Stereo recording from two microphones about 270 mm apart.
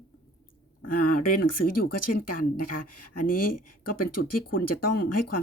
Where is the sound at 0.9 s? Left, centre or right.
Left.